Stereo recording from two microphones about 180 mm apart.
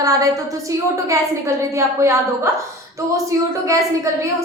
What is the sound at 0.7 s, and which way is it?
A woman's voice, 15° right (ahead or behind).